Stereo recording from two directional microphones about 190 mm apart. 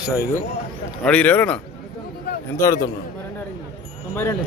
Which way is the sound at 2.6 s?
15° left (ahead or behind).